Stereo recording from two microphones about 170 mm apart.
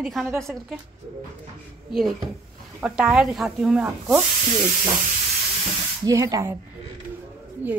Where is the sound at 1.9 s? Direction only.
Centre (ahead or behind).